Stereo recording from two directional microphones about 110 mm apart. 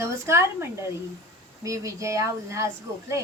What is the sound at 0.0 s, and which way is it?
A woman's voice, 25° right (ahead or behind).